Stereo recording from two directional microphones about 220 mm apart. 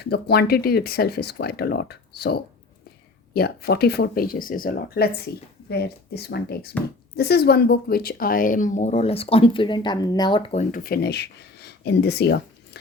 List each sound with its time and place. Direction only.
0.0 s speech: 45° left (ahead or behind)